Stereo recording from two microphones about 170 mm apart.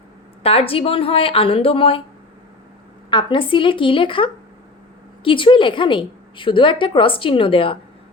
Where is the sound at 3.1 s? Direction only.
25° left (ahead or behind).